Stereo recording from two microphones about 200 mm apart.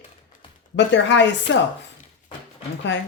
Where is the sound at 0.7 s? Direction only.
60° left (ahead or behind).